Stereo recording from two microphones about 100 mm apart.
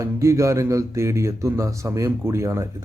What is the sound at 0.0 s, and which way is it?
A man's voice, 30° right (ahead or behind).